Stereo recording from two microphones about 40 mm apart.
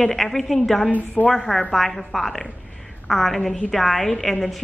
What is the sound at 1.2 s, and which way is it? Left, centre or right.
A woman's voice, centre.